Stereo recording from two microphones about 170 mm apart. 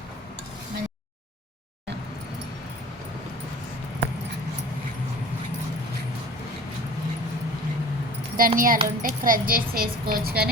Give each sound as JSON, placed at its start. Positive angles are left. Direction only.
{"t": 8.4, "sound": "a woman's voice", "side_deg": -55}